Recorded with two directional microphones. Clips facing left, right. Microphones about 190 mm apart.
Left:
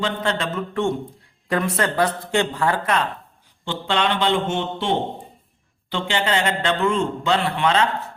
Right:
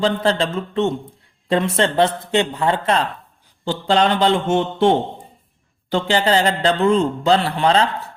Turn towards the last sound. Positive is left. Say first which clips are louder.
# right 3 dB
turn(degrees=-35)  # may be behind; listen again after turning